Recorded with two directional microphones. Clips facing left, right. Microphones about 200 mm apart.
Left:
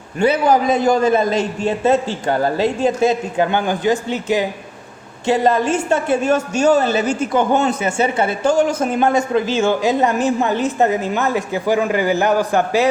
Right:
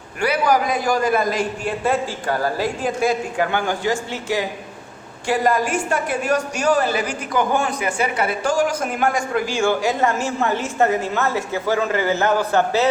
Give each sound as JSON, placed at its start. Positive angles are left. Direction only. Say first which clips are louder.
{"t": 0.2, "sound": "a woman's voice", "louder": "left 4 dB", "side_deg": 25}